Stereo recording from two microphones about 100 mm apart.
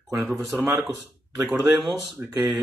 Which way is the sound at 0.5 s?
20° right (ahead or behind).